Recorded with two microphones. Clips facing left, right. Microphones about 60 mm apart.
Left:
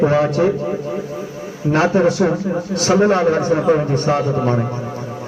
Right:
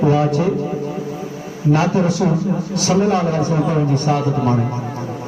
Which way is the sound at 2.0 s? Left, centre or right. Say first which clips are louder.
Left 2 dB; left.